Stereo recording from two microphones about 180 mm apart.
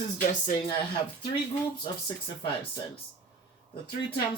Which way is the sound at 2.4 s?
30° left (ahead or behind).